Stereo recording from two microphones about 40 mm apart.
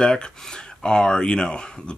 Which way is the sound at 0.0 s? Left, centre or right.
Left.